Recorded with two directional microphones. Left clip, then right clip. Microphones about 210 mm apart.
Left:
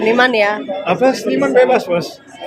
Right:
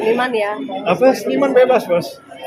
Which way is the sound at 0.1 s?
45° left (ahead or behind).